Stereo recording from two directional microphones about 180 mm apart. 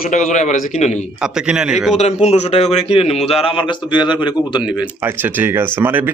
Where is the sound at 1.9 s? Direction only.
40° left (ahead or behind).